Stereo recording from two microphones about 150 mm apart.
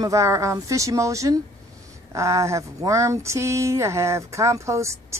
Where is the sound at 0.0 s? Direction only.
20° right (ahead or behind).